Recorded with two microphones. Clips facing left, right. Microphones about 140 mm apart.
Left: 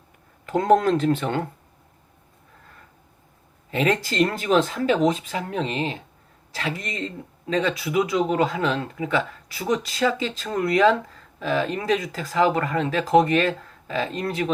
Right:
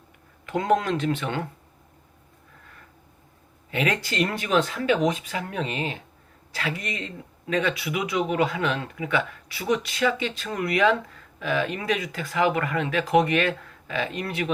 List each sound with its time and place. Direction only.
0.4 s speech: 40° left (ahead or behind)
3.7 s speech: 35° left (ahead or behind)